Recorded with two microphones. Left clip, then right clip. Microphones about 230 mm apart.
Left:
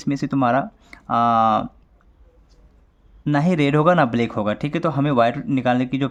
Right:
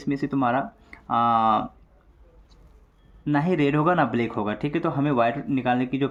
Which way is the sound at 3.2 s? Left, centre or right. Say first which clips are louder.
Left 3 dB; left.